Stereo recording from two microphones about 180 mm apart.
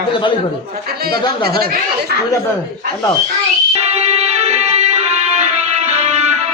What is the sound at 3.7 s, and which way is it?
Music, 35° right (ahead or behind).